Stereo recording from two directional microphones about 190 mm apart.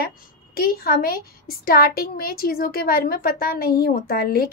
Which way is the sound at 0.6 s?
55° left (ahead or behind).